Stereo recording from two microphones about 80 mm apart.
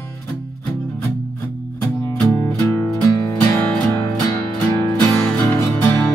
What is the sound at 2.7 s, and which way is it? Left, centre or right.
Music, left.